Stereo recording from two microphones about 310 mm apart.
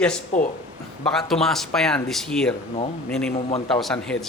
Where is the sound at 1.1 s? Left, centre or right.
Centre.